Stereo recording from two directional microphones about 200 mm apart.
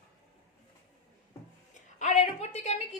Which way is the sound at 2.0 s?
35° left (ahead or behind).